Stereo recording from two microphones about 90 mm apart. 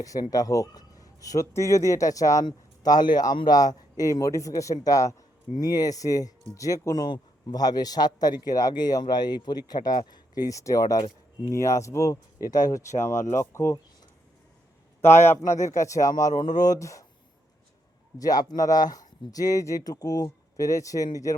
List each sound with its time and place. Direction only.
0.0 s speech: 40° left (ahead or behind)
2.5 s speech: 50° left (ahead or behind)
7.0 s speech: 50° left (ahead or behind)
13.2 s speech: 30° left (ahead or behind)
15.0 s speech: 30° left (ahead or behind)
18.2 s speech: 45° left (ahead or behind)